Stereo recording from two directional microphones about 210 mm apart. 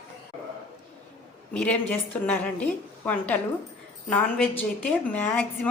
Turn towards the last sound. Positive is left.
turn(degrees=5)  # may be behind; listen again after turning